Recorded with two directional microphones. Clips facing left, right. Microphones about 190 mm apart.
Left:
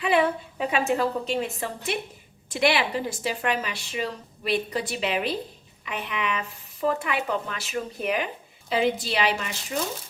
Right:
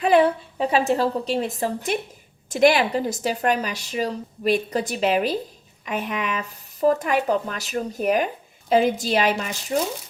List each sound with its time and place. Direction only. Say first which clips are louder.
0.0 s a woman's voice: right 5 dB; 40° right (ahead or behind)